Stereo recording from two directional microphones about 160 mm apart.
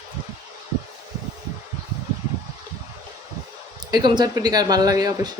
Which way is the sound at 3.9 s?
25° right (ahead or behind).